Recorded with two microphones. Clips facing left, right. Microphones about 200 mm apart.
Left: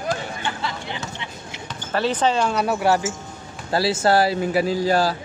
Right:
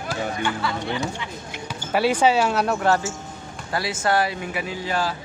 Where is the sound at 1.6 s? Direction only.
10° right (ahead or behind); by 3.1 s 15° left (ahead or behind).